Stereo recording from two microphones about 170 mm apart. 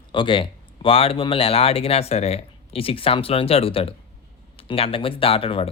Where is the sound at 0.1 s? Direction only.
30° left (ahead or behind).